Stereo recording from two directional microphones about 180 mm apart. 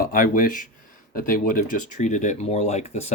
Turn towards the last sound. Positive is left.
turn(degrees=40)  # may be behind; listen again after turning